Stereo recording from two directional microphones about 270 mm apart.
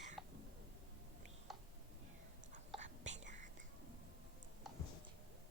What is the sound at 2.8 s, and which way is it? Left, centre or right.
Whispering, right.